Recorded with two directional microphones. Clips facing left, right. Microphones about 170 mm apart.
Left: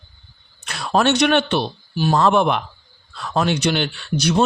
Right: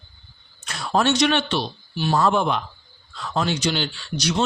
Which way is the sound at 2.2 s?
70° left (ahead or behind).